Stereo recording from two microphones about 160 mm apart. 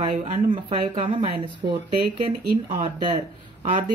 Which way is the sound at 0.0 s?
40° right (ahead or behind).